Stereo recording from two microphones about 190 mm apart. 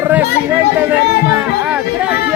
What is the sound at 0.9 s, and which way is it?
Music, 5° right (ahead or behind).